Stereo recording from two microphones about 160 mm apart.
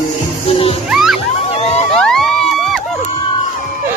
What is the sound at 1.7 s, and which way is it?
Music, 40° left (ahead or behind).